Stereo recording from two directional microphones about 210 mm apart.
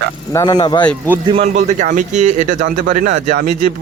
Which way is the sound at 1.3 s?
30° right (ahead or behind).